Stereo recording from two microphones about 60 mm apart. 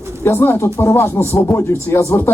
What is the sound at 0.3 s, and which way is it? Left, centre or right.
A man's voice, left.